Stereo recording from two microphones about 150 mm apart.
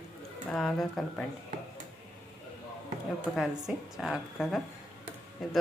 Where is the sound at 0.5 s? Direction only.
5° left (ahead or behind).